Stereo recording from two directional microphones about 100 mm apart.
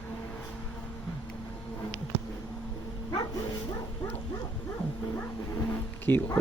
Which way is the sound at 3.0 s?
40° left (ahead or behind).